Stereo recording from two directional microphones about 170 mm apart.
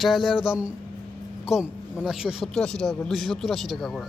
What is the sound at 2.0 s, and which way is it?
Speech, centre (ahead or behind).